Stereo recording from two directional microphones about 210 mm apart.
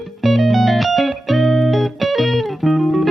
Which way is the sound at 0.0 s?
Centre (ahead or behind).